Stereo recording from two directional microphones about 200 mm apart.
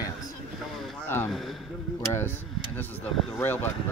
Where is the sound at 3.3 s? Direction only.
10° left (ahead or behind).